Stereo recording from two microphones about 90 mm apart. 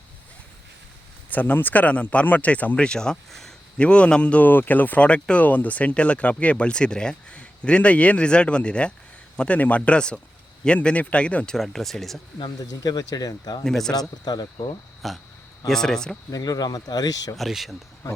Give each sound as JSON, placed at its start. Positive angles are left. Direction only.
{"t": 1.3, "sound": "speech", "side_deg": 20}
{"t": 11.5, "sound": "speech", "side_deg": 5}
{"t": 12.8, "sound": "speech", "side_deg": 45}
{"t": 13.7, "sound": "speech", "side_deg": 5}
{"t": 13.9, "sound": "speech", "side_deg": 45}
{"t": 15.0, "sound": "speech", "side_deg": 0}
{"t": 16.3, "sound": "speech", "side_deg": 45}
{"t": 17.3, "sound": "speech", "side_deg": 0}